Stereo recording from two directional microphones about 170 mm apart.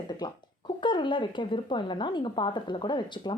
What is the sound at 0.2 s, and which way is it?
Speech, 25° left (ahead or behind).